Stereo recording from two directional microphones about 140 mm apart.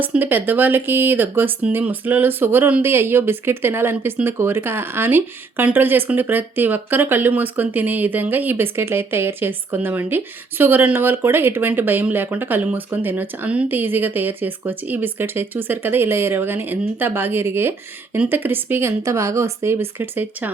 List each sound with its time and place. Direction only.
0.0 s speech: 10° right (ahead or behind)